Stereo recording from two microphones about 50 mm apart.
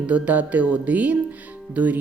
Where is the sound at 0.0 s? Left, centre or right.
Right.